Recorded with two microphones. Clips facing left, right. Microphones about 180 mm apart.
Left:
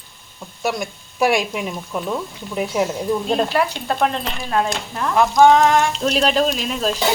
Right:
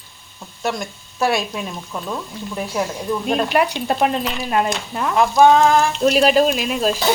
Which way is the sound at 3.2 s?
15° right (ahead or behind).